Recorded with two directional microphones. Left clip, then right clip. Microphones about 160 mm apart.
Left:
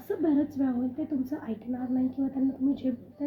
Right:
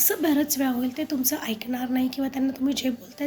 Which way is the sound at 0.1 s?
25° right (ahead or behind).